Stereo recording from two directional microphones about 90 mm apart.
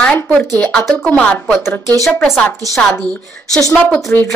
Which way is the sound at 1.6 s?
25° left (ahead or behind).